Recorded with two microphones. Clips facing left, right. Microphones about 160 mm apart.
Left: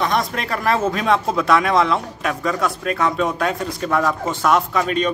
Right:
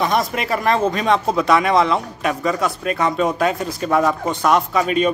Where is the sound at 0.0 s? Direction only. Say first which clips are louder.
Right 2 dB; centre (ahead or behind).